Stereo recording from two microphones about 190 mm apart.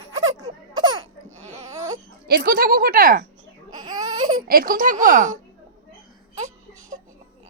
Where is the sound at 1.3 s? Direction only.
35° right (ahead or behind).